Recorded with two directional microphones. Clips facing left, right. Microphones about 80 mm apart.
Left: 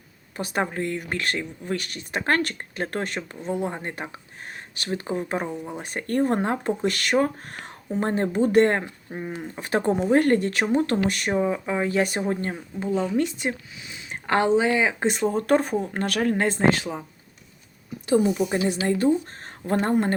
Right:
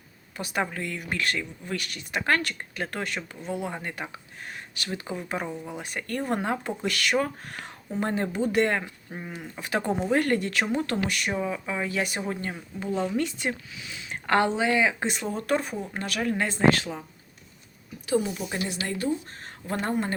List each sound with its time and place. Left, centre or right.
0.3 s speech: left
3.2 s speech: centre
3.5 s speech: left
5.5 s speech: centre
5.8 s speech: left
9.1 s speech: left
13.1 s speech: left
16.4 s speech: left
16.7 s speech: centre
18.4 s a woman's voice: left
18.9 s speech: left